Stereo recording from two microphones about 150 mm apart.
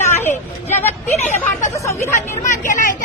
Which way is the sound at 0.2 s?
15° left (ahead or behind).